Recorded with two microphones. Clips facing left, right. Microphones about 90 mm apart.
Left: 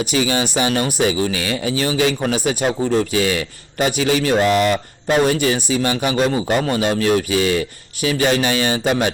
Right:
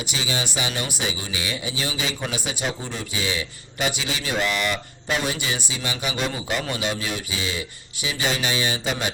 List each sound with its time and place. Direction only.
0.1 s speech: 50° left (ahead or behind)